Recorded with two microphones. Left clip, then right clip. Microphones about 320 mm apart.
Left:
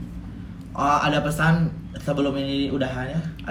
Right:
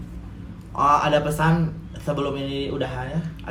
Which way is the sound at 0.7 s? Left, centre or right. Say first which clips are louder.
Right 2 dB; centre.